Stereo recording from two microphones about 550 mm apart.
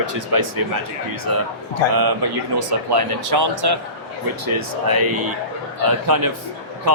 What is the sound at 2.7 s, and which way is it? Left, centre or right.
Speech, right.